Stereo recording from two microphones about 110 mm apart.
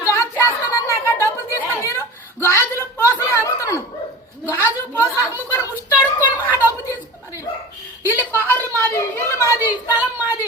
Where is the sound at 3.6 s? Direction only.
25° left (ahead or behind).